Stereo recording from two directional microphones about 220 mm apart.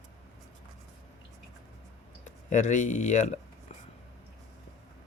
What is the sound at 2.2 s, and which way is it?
Speech, 35° left (ahead or behind).